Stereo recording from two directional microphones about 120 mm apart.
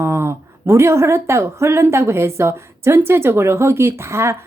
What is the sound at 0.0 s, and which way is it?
A woman's voice, 20° right (ahead or behind).